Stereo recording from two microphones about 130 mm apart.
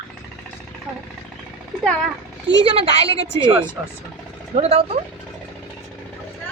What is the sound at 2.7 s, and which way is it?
Speech, 50° right (ahead or behind).